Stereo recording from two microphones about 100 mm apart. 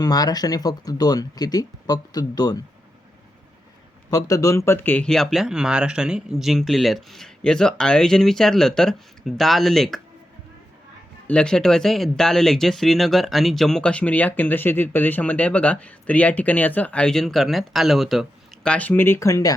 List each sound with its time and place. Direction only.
0.0 s speech: 40° left (ahead or behind)
4.1 s speech: 35° left (ahead or behind)
5.0 s speech: 5° left (ahead or behind)
11.3 s speech: 10° left (ahead or behind)
18.7 s speech: 15° left (ahead or behind); by 19.5 s 35° left (ahead or behind)